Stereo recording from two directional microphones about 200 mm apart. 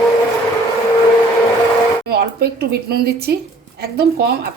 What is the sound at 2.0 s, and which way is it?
A woman's voice, 55° right (ahead or behind).